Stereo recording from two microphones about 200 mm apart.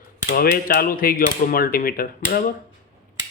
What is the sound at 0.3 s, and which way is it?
Speech, 50° left (ahead or behind).